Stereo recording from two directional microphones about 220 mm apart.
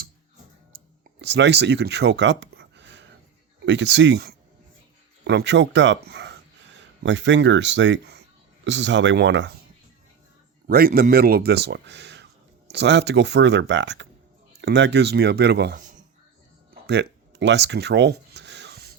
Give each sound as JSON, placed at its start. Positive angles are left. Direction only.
{"t": 0.7, "sound": "clicking", "side_deg": -40}
{"t": 1.2, "sound": "speech", "side_deg": -50}
{"t": 10.7, "sound": "speech", "side_deg": -40}
{"t": 16.8, "sound": "a sound", "side_deg": -50}